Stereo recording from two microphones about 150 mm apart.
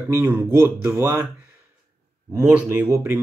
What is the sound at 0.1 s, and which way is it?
Speech, 15° right (ahead or behind).